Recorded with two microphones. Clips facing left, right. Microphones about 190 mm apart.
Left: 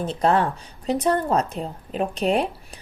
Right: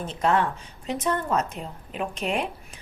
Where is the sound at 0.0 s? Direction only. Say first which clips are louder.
Left 3 dB; 35° left (ahead or behind).